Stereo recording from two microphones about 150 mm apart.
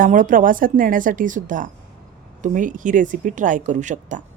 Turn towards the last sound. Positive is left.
turn(degrees=-55)  # may be behind; listen again after turning